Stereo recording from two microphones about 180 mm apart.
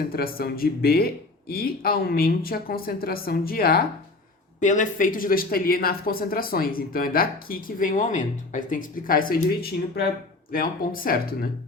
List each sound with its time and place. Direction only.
0.1 s speech: 55° left (ahead or behind)
4.6 s a woman's voice: 45° left (ahead or behind)